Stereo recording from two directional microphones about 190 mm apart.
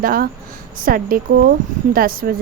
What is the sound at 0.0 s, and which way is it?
A woman's voice, 50° right (ahead or behind).